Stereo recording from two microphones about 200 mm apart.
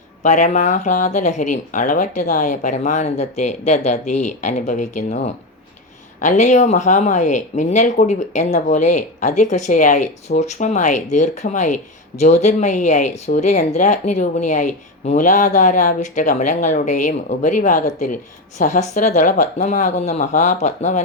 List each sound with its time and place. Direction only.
0.2 s speech: 40° left (ahead or behind)